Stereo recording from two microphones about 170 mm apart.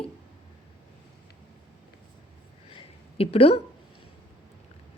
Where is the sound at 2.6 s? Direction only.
35° left (ahead or behind).